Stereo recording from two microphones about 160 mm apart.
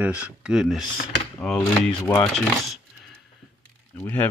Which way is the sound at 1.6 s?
15° left (ahead or behind).